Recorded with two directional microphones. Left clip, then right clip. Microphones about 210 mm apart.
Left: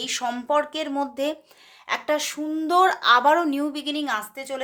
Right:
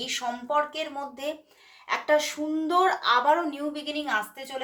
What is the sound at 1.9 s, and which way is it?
Speech, 40° left (ahead or behind).